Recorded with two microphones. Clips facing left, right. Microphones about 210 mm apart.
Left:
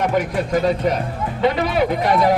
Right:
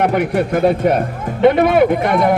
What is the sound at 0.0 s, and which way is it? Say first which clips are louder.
Speech: right 4 dB; 65° right (ahead or behind).